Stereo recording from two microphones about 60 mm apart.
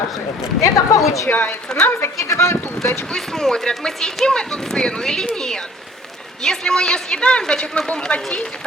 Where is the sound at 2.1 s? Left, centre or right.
Left.